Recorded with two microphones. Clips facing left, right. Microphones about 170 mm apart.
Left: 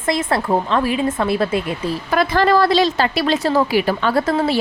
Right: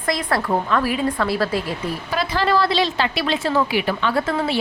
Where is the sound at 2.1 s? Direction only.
50° left (ahead or behind).